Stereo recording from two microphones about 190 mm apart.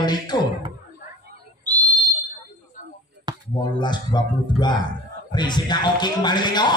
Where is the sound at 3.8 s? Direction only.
25° left (ahead or behind).